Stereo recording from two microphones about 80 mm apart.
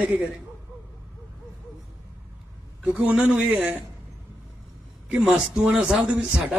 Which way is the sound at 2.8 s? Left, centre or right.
Centre.